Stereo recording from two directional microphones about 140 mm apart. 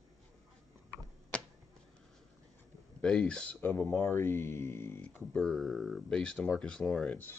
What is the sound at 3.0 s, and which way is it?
Speech, 5° left (ahead or behind).